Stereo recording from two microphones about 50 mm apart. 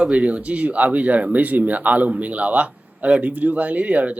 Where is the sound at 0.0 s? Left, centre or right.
Right.